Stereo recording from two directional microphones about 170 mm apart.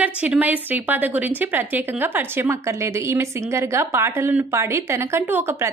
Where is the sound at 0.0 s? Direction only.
10° right (ahead or behind).